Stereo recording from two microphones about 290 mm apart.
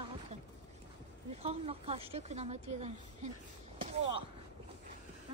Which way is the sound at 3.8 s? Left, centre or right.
Centre.